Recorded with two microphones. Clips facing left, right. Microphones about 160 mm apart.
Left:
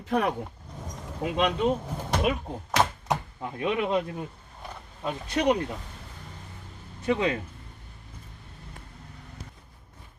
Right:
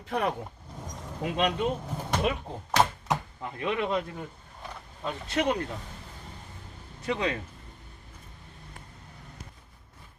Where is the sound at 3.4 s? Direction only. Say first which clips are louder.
Left 2 dB; 20° left (ahead or behind).